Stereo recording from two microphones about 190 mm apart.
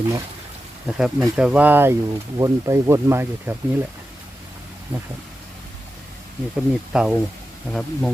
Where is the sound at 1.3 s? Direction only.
5° right (ahead or behind).